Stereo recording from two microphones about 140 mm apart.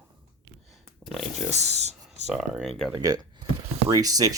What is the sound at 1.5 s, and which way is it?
Speech, 50° right (ahead or behind).